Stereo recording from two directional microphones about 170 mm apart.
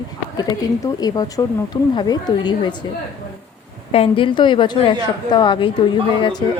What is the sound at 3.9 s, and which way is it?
A woman's voice, 35° left (ahead or behind).